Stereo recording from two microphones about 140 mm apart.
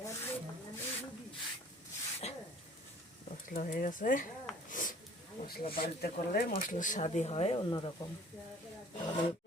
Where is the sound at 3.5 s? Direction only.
75° left (ahead or behind).